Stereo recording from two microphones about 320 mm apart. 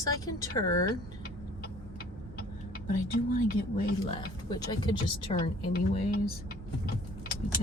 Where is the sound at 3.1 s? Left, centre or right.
Left.